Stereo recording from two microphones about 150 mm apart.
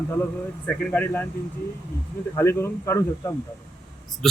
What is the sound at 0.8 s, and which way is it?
Speech, 10° left (ahead or behind).